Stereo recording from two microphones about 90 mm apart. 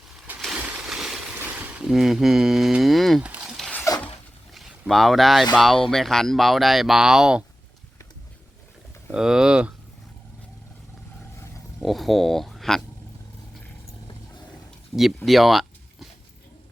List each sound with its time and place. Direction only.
0.3 s a sound: 5° right (ahead or behind)
1.5 s speech: 10° right (ahead or behind)
3.2 s speech: 15° right (ahead or behind)
3.9 s a sound: 35° left (ahead or behind)
4.5 s speech: centre (ahead or behind)
9.1 s speech: 10° right (ahead or behind)
11.8 s speech: centre (ahead or behind)
14.9 s speech: centre (ahead or behind)